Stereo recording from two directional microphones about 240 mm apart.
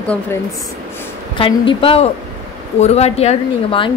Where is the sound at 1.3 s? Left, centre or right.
Left.